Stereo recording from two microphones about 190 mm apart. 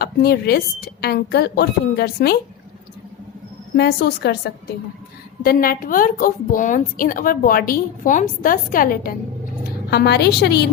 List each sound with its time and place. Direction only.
0.0 s a woman's voice: 55° left (ahead or behind)
3.8 s a woman's voice: 60° left (ahead or behind)
9.9 s a woman's voice: 60° left (ahead or behind)